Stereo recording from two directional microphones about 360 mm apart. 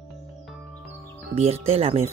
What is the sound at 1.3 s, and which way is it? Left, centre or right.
Speech, centre.